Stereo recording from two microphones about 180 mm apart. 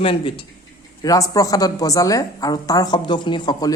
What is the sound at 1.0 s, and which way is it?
Speech, 20° left (ahead or behind).